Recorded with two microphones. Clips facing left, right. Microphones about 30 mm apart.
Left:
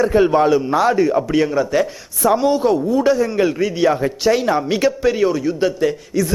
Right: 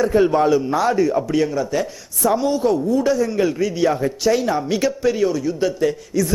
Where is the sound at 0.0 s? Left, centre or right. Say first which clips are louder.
Left 2 dB; left.